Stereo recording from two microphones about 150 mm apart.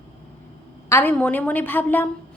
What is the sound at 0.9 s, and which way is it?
A woman's voice, 15° left (ahead or behind).